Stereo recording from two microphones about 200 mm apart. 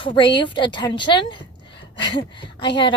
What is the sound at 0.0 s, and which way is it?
A woman's voice, 25° left (ahead or behind).